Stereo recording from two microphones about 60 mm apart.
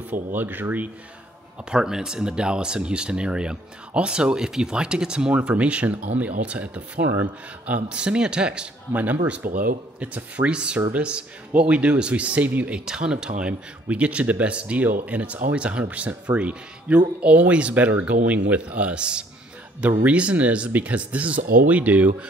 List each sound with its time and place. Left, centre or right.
0.3 s speech: right
1.7 s speech: centre
8.9 s speech: right
12.7 s speech: centre